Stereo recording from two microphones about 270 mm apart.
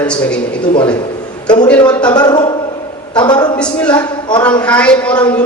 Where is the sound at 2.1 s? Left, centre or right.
Centre.